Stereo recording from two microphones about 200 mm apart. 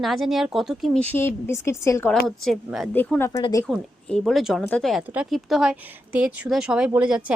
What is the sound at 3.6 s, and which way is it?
Speech, 5° left (ahead or behind).